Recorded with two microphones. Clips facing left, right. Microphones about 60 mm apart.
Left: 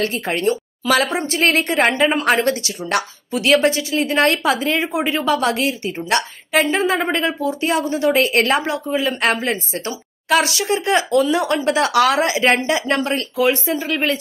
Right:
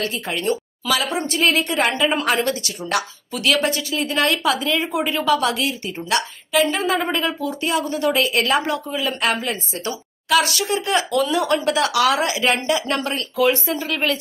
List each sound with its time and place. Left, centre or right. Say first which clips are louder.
0.0 s a woman's voice: left 4 dB; left